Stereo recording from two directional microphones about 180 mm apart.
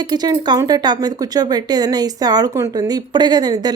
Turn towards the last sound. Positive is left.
turn(degrees=-20)  # may be behind; listen again after turning